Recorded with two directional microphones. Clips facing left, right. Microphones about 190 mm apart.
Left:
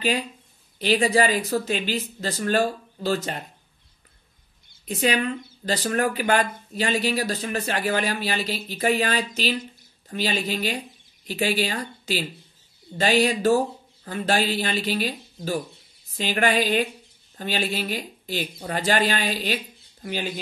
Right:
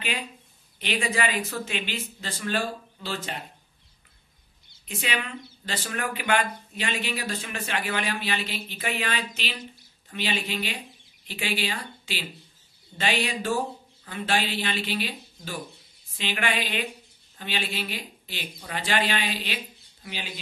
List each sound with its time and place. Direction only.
0.7 s speech: 35° left (ahead or behind)
4.8 s speech: 40° left (ahead or behind)